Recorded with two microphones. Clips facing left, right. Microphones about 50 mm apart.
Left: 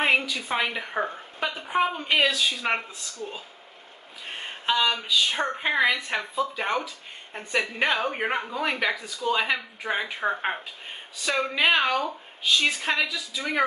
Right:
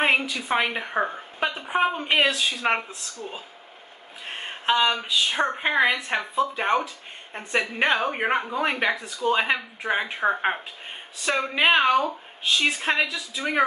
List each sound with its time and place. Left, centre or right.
0.0 s a woman's voice: right
4.4 s a sound: centre
5.3 s a woman's voice: centre